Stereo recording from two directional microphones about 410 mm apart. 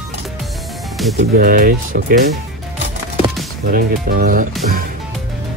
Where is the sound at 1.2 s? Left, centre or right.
Right.